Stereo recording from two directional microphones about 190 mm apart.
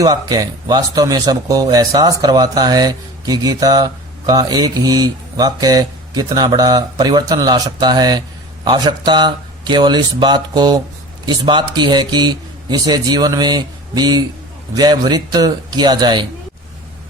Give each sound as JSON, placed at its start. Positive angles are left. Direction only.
{"t": 0.0, "sound": "speech", "side_deg": -20}